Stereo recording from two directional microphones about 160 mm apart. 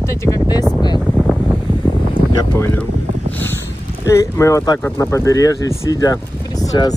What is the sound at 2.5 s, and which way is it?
Speech, 15° left (ahead or behind).